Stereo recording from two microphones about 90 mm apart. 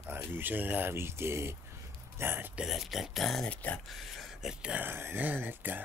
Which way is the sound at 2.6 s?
Centre (ahead or behind).